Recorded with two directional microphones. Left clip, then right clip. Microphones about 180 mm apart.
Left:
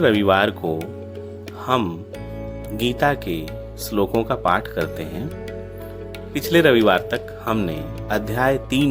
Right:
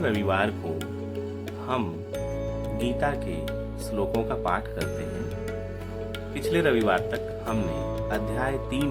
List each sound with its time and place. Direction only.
0.0 s speech: 45° left (ahead or behind)
1.6 s speech: 40° left (ahead or behind)
6.3 s speech: 40° left (ahead or behind)